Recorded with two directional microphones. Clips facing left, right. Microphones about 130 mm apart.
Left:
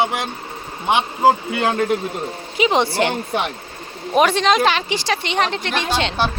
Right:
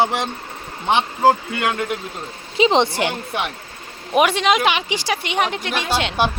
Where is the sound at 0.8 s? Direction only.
15° left (ahead or behind).